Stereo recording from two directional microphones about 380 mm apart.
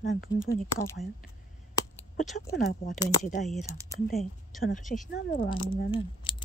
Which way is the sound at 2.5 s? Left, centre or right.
Left.